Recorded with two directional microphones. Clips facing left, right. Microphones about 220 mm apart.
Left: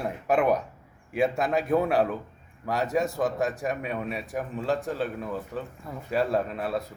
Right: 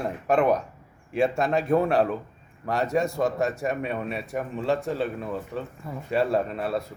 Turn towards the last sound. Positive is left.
turn(degrees=0)  # may be behind; listen again after turning